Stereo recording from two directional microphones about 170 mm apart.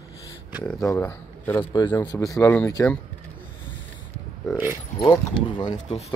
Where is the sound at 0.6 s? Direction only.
15° left (ahead or behind).